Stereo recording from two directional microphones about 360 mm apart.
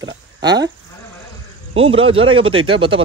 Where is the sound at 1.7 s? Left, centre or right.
Centre.